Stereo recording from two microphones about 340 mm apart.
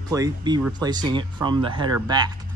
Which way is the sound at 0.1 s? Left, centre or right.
Centre.